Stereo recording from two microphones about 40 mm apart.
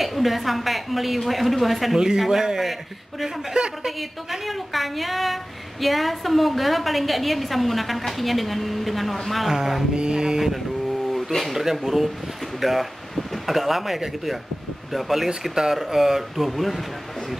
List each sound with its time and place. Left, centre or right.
0.0 s a woman's voice: centre
2.0 s a man's voice: centre
3.8 s a woman's voice: centre
9.9 s a sound: right
11.1 s a sound: centre
11.5 s a woman's voice: centre